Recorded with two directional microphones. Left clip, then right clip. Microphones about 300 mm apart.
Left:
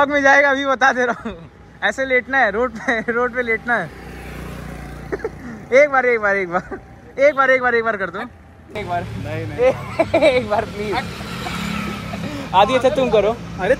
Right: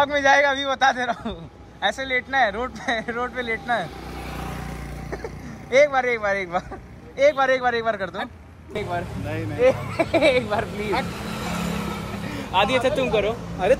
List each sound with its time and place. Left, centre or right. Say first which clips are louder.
0.0 s a man's voice: left 4 dB; centre
11.0 s vehicle: left 2 dB; right
12.3 s speech: left 6 dB; centre